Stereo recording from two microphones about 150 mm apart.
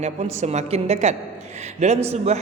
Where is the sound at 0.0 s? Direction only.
45° right (ahead or behind).